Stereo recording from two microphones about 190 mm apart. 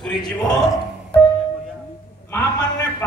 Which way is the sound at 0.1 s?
20° left (ahead or behind).